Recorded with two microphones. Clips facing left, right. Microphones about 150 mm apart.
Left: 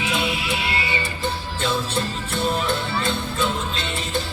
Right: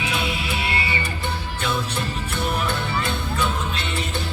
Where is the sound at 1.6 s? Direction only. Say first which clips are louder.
Left 2 dB; 20° left (ahead or behind).